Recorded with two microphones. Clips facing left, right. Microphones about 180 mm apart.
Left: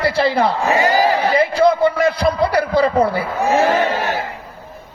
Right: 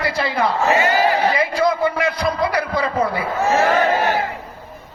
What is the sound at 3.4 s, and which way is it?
Speech, 15° left (ahead or behind).